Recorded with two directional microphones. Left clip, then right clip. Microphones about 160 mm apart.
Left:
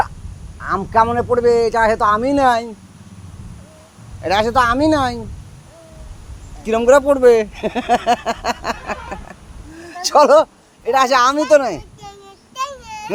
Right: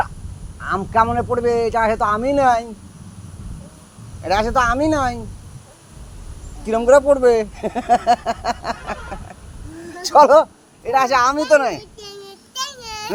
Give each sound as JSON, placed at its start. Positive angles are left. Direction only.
{"t": 0.6, "sound": "speech", "side_deg": 35}
{"t": 4.2, "sound": "speech", "side_deg": 35}
{"t": 6.7, "sound": "speech", "side_deg": 35}
{"t": 12.5, "sound": "child singing", "side_deg": 10}